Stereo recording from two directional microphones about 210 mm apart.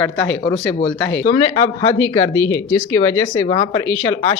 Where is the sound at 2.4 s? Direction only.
70° left (ahead or behind).